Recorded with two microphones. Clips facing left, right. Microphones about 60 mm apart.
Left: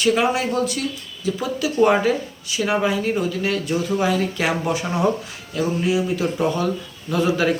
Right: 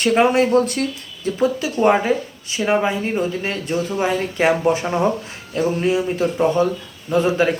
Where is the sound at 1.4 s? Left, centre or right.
Right.